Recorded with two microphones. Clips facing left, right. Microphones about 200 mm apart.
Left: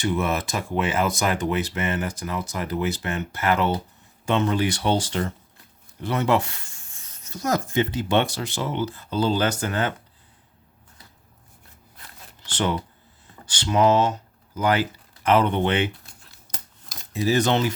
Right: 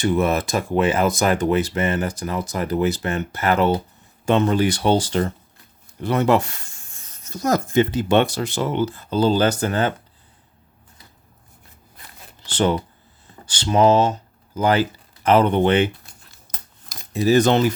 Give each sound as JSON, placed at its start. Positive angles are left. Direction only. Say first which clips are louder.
{"t": 0.0, "sound": "speech", "louder": "right 5 dB", "side_deg": -40}
{"t": 6.0, "sound": "speech", "louder": "right 4 dB", "side_deg": -45}
{"t": 12.5, "sound": "speech", "louder": "right 5 dB", "side_deg": -30}
{"t": 17.2, "sound": "speech", "louder": "right 5 dB", "side_deg": -45}